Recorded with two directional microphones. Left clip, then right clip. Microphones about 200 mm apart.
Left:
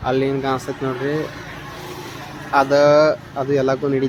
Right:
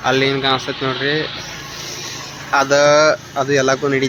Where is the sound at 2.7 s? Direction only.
Centre (ahead or behind).